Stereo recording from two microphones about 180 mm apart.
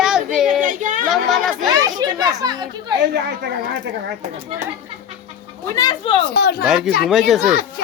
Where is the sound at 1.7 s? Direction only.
20° right (ahead or behind).